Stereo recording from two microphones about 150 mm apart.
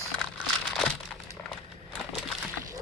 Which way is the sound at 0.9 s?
10° left (ahead or behind).